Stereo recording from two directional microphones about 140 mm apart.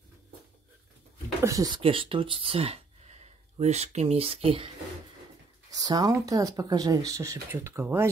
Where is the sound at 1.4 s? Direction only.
25° right (ahead or behind).